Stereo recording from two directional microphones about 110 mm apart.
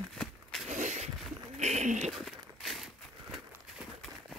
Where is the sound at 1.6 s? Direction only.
90° right.